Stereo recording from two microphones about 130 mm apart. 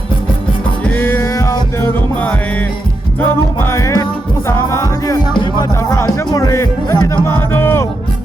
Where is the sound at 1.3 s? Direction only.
25° left (ahead or behind).